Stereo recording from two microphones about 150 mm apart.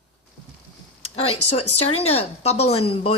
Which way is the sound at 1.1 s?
40° left (ahead or behind).